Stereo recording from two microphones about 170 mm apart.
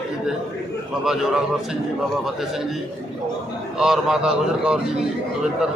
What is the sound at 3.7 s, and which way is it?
A man's voice, 5° right (ahead or behind).